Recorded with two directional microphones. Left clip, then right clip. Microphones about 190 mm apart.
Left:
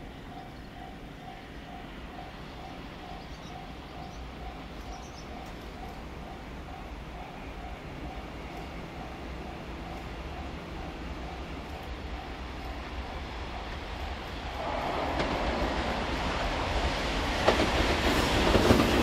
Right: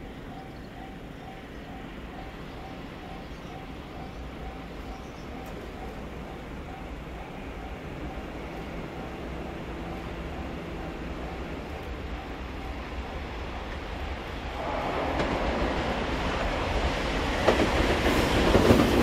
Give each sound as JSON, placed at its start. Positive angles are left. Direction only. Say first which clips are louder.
{"t": 14.4, "sound": "train", "louder": "right 2 dB", "side_deg": -25}